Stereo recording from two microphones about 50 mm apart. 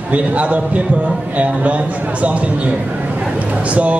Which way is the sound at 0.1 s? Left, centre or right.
Right.